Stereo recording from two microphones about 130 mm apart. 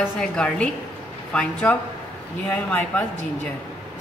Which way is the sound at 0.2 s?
5° left (ahead or behind).